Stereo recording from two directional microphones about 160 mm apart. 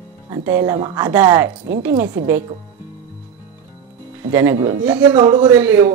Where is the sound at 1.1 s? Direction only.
15° right (ahead or behind).